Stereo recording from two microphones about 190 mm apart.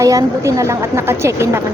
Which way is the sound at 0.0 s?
15° right (ahead or behind).